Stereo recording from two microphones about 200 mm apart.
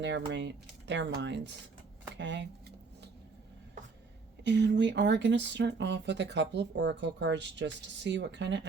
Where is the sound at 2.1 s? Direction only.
60° right (ahead or behind).